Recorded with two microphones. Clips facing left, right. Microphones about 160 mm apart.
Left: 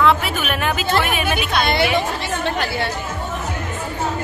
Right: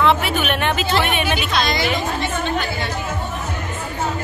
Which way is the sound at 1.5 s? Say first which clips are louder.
Left 2 dB; 60° left (ahead or behind).